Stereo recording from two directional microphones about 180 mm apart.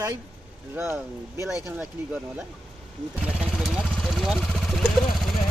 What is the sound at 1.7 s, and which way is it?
Speech, 5° right (ahead or behind).